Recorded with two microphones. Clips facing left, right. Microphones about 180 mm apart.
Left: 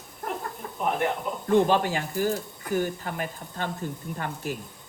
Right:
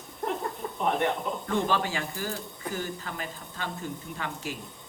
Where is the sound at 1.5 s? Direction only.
55° left (ahead or behind).